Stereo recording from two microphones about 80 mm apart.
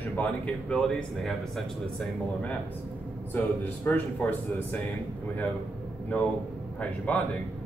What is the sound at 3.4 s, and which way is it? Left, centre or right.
A man's voice, left.